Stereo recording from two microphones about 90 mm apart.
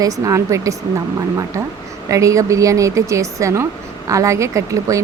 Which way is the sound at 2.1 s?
35° right (ahead or behind).